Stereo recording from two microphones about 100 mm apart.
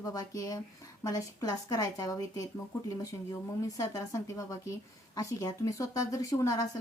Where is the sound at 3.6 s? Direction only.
35° left (ahead or behind).